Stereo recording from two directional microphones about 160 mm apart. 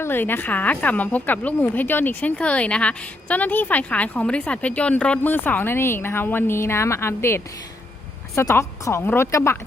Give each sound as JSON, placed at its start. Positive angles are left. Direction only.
{"t": 0.0, "sound": "speech", "side_deg": 15}